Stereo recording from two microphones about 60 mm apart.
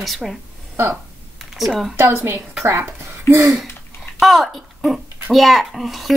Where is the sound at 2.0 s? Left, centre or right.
Right.